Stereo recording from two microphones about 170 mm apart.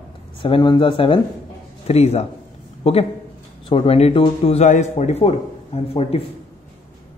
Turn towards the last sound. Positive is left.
turn(degrees=35)  # may be behind; listen again after turning